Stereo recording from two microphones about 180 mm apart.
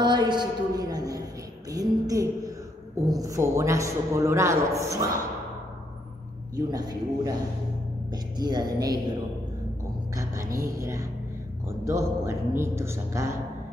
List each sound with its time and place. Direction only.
0.0 s a sound: 25° right (ahead or behind)
3.1 s a man's voice: 20° right (ahead or behind)
6.5 s a woman's voice: 20° right (ahead or behind)
10.1 s a man's voice: 20° right (ahead or behind)